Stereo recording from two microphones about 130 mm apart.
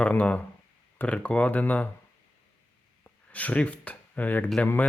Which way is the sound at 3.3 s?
10° left (ahead or behind).